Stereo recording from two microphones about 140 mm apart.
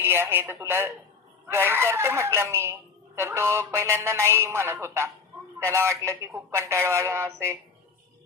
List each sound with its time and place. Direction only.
0.0 s speech: 15° right (ahead or behind)